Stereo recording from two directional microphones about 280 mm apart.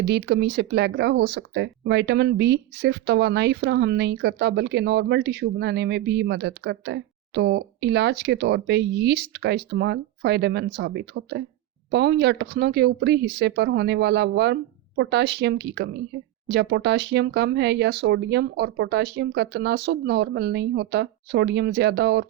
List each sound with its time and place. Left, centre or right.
0.0 s speech: right